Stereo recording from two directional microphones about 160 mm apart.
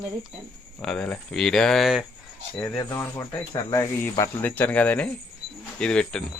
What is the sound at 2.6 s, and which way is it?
Speech, 20° left (ahead or behind).